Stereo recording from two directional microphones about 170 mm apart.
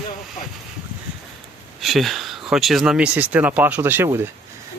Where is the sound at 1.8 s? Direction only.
Centre (ahead or behind).